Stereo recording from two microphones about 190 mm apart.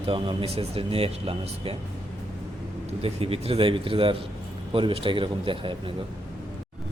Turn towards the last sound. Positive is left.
turn(degrees=-25)  # may be behind; listen again after turning